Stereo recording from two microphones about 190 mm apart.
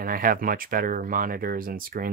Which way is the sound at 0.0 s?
50° right (ahead or behind).